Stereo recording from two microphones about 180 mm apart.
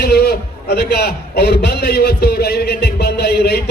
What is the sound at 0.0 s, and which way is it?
A man's voice, 60° left (ahead or behind).